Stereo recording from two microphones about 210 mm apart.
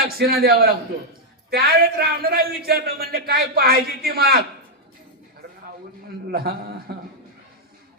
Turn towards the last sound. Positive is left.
turn(degrees=-50)  # may be behind; listen again after turning